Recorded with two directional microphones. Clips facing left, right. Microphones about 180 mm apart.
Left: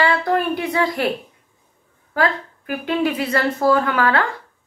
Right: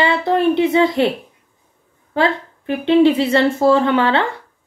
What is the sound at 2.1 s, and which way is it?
A woman's voice, 25° right (ahead or behind).